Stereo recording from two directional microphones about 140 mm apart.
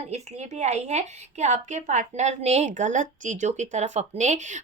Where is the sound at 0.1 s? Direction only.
55° right (ahead or behind).